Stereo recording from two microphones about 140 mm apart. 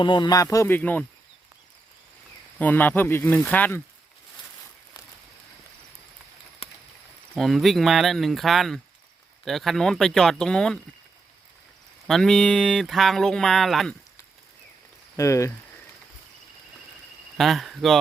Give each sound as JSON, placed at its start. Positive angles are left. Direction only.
{"t": 0.0, "sound": "speech", "side_deg": 35}
{"t": 0.4, "sound": "speech", "side_deg": 20}
{"t": 2.6, "sound": "speech", "side_deg": 10}
{"t": 7.3, "sound": "speech", "side_deg": 0}
{"t": 12.0, "sound": "speech", "side_deg": 5}
{"t": 15.1, "sound": "speech", "side_deg": 20}
{"t": 17.3, "sound": "speech", "side_deg": 0}